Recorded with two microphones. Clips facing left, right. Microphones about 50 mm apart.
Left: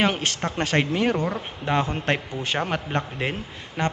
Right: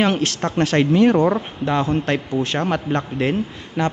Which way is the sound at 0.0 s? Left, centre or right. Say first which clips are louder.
Right 4 dB; centre.